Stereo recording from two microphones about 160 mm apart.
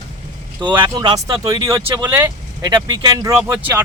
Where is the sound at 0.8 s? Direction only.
25° right (ahead or behind).